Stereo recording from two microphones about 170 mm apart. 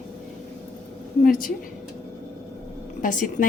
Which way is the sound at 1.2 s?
55° left (ahead or behind).